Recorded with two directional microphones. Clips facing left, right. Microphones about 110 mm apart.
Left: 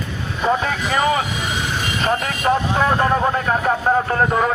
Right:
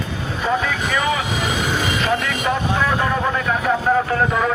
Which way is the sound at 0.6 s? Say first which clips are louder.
Left 2 dB; 40° left (ahead or behind).